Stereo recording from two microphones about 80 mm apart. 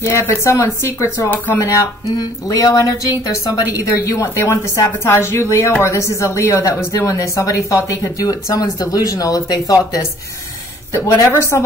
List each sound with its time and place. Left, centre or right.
0.0 s a woman's voice: left
10.9 s a woman's voice: left